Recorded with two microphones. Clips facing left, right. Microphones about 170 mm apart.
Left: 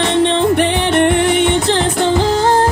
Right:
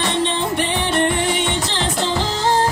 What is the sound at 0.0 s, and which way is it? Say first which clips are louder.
Music: left 7 dB; 60° left (ahead or behind).